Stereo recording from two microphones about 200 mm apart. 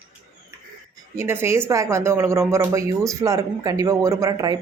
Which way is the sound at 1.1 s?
10° right (ahead or behind).